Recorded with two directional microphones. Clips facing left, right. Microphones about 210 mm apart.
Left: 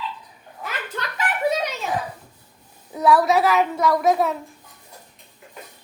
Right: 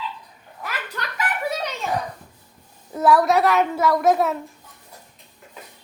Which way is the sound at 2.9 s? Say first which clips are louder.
Even; centre (ahead or behind).